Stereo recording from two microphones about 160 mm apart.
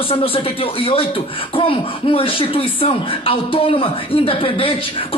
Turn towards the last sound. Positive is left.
turn(degrees=35)  # may be behind; listen again after turning